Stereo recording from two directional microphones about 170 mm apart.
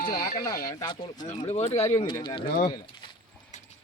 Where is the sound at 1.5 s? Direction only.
40° left (ahead or behind).